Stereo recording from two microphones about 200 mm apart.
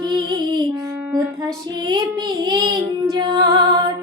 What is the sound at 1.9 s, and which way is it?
Child singing, 20° right (ahead or behind).